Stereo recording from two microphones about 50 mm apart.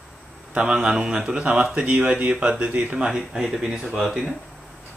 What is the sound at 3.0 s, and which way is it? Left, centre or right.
Speech, centre.